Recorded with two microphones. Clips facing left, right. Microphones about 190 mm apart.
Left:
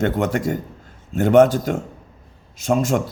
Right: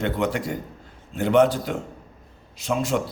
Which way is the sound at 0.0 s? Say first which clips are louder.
Left 4 dB; 45° left (ahead or behind).